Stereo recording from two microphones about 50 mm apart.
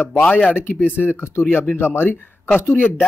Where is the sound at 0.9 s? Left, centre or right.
Left.